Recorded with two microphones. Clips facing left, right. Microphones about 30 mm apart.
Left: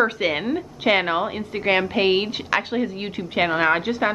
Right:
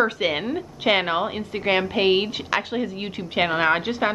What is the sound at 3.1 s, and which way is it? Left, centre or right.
Speech, centre.